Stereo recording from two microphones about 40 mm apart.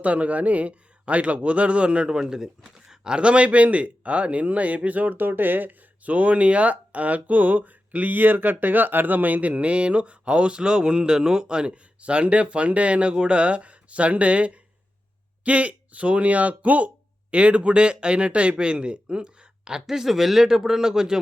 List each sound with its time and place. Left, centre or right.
0.0 s speech: right
2.6 s speech: centre